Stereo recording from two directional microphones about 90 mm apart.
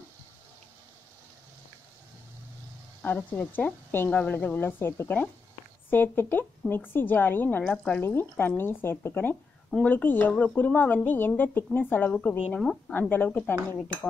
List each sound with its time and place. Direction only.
3.0 s a woman's voice: 20° left (ahead or behind)
8.0 s a woman's voice: 25° left (ahead or behind); by 12.9 s 10° left (ahead or behind)
13.1 s a woman's voice: 20° left (ahead or behind)